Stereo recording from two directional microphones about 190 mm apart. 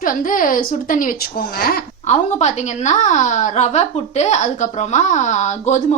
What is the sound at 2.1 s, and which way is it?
A woman's voice, 35° left (ahead or behind).